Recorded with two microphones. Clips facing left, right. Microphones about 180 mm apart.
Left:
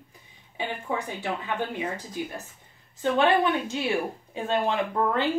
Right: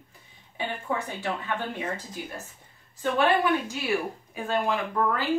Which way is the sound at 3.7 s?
25° left (ahead or behind).